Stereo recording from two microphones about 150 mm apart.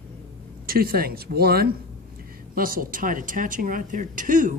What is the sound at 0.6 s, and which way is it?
Speech, 85° right.